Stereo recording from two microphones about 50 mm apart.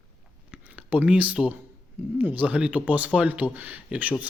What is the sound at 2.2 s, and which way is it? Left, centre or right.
Speech, right.